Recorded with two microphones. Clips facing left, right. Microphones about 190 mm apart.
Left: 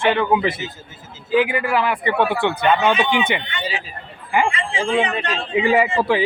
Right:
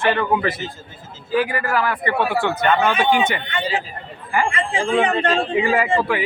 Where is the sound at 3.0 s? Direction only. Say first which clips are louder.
Right 2 dB; 50° right (ahead or behind).